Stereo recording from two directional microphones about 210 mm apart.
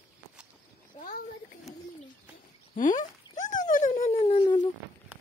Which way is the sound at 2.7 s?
40° left (ahead or behind).